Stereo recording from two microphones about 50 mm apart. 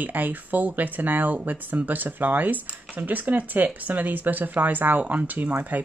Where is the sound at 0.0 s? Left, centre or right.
Right.